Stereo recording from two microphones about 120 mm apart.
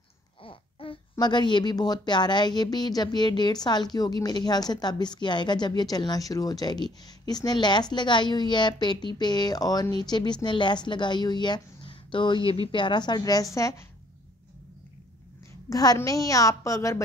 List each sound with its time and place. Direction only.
0.4 s babbling: 50° left (ahead or behind)
1.1 s a woman's voice: 40° left (ahead or behind)
15.7 s a woman's voice: 30° left (ahead or behind)